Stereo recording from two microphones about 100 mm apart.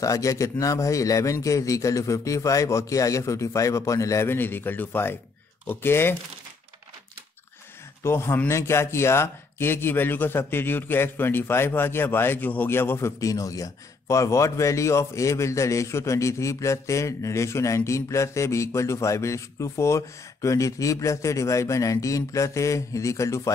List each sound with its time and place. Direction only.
0.0 s speech: 35° left (ahead or behind)
8.0 s speech: 25° left (ahead or behind)